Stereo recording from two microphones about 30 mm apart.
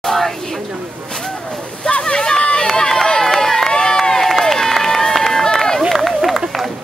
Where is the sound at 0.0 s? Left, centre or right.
Centre.